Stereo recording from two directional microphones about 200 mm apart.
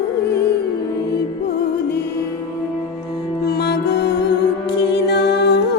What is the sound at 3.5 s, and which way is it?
Music, 55° left (ahead or behind).